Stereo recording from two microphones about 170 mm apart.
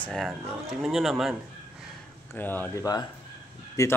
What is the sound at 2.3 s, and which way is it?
Speech, 10° left (ahead or behind).